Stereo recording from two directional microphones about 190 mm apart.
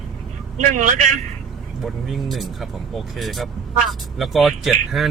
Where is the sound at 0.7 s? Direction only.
40° right (ahead or behind).